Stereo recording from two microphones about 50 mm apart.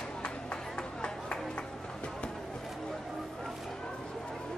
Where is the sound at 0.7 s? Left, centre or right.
Centre.